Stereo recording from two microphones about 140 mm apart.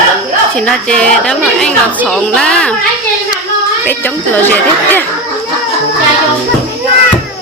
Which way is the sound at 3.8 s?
15° left (ahead or behind).